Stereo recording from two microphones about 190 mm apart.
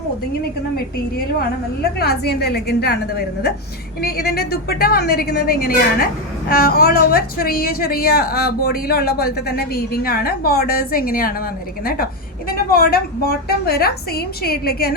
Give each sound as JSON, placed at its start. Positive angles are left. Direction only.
{"t": 2.0, "sound": "a woman's voice", "side_deg": 55}
{"t": 12.5, "sound": "a woman's voice", "side_deg": 50}